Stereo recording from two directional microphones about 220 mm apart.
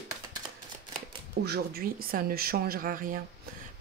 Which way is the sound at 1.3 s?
45° right (ahead or behind).